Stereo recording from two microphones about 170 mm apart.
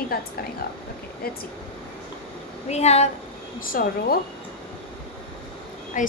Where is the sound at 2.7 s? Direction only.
40° left (ahead or behind).